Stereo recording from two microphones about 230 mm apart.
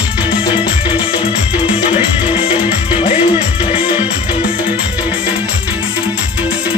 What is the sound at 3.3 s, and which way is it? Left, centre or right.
Music, centre.